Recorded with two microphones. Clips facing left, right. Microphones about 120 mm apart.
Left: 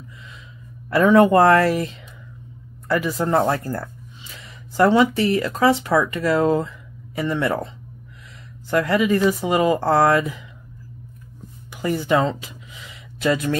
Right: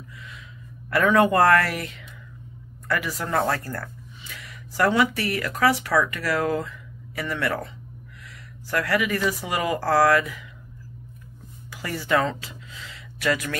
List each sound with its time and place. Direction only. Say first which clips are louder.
0.8 s speech: left 5 dB; 20° left (ahead or behind)
11.7 s speech: left 4 dB; 20° left (ahead or behind)